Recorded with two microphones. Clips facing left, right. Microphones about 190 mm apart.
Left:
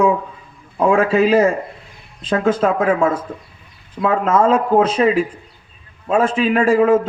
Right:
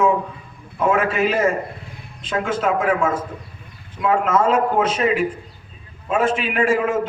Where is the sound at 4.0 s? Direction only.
35° left (ahead or behind).